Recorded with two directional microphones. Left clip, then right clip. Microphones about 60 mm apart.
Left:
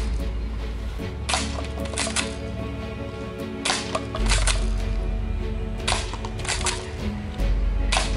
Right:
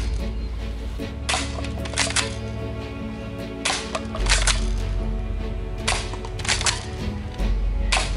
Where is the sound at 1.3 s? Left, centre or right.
Centre.